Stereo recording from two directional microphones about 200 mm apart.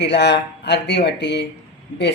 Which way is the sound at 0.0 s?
60° left (ahead or behind).